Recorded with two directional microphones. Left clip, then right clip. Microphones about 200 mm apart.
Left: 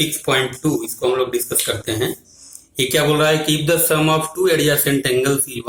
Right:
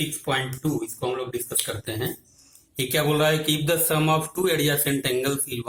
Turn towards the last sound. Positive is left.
turn(degrees=-15)  # may be behind; listen again after turning